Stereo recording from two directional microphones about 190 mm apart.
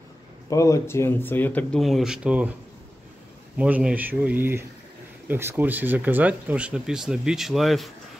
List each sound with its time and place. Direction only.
0.5 s speech: 15° left (ahead or behind); by 2.5 s 5° right (ahead or behind)
3.5 s speech: 5° right (ahead or behind)